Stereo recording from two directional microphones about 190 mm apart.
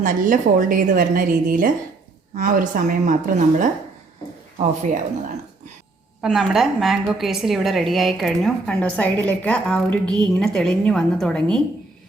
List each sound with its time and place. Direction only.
0.0 s a woman's voice: 45° right (ahead or behind)
4.5 s speech: 40° right (ahead or behind)
6.2 s a woman's voice: centre (ahead or behind)